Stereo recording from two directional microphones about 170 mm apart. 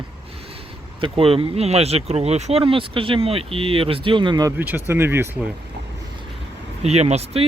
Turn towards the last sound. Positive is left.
turn(degrees=-40)  # may be behind; listen again after turning